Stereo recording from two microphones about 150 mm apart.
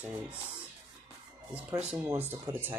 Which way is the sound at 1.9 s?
15° right (ahead or behind).